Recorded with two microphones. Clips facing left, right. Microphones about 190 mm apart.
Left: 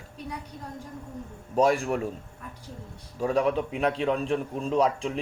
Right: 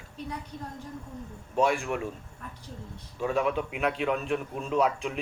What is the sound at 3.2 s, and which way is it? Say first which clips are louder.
Speech: left 3 dB; 35° left (ahead or behind).